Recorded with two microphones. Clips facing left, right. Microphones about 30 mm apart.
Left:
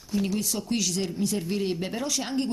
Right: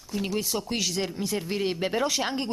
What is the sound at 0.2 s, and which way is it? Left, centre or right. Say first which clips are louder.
Speech: right 2 dB; centre.